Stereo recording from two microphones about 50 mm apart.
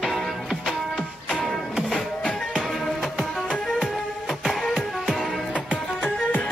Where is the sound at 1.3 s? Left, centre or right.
Centre.